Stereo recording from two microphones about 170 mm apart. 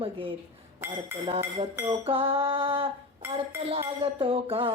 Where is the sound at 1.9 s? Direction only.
35° right (ahead or behind).